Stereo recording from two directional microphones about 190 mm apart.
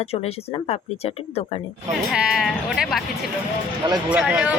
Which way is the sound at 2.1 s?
5° right (ahead or behind).